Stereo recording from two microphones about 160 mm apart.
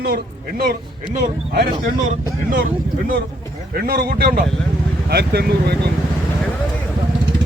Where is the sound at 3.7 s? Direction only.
70° right (ahead or behind).